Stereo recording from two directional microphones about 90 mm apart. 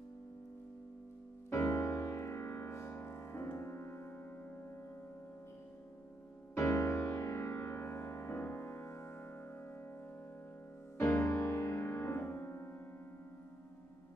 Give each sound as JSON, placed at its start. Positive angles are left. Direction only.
{"t": 1.5, "sound": "music", "side_deg": 35}
{"t": 6.5, "sound": "music", "side_deg": 35}
{"t": 11.0, "sound": "music", "side_deg": 35}